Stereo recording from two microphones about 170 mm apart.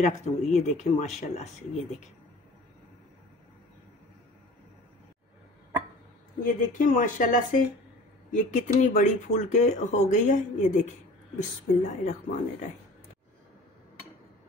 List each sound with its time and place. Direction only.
0.0 s speech: 45° left (ahead or behind)
6.4 s speech: 50° left (ahead or behind)